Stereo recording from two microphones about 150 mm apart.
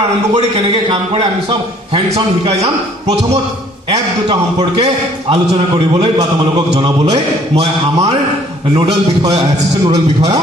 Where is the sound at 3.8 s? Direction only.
40° right (ahead or behind).